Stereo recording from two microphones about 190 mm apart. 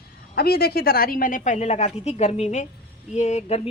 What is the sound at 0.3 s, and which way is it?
Speech, 55° left (ahead or behind).